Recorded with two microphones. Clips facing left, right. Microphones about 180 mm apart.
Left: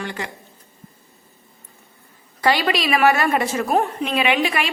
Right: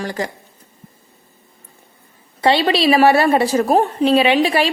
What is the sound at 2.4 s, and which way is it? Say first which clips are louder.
A woman's voice: right 5 dB; 25° right (ahead or behind).